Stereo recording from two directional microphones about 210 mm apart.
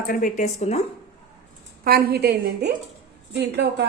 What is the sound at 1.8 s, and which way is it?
A woman's voice, 45° right (ahead or behind).